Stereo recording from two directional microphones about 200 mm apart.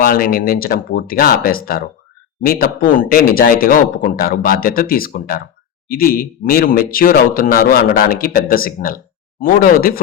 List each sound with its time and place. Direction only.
0.0 s speech: 45° left (ahead or behind)